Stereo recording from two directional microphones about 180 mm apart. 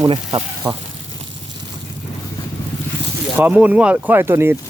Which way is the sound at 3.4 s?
10° right (ahead or behind).